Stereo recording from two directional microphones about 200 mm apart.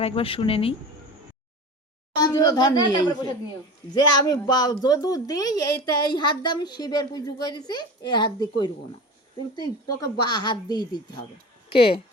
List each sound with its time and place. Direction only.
0.0 s a woman's voice: 25° left (ahead or behind)
2.1 s a woman's voice: 20° left (ahead or behind)